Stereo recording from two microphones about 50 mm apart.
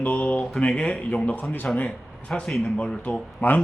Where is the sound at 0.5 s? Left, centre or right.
Centre.